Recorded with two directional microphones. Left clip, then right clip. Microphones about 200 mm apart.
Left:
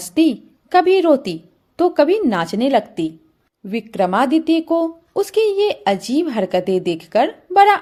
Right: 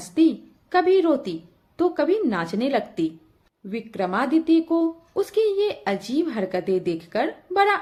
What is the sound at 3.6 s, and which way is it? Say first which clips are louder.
Speech: left 8 dB; 45° left (ahead or behind).